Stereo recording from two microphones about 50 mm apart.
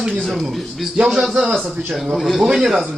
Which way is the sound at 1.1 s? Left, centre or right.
Centre.